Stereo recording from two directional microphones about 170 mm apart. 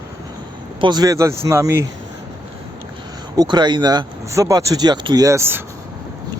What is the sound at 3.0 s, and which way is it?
Speech, 25° right (ahead or behind).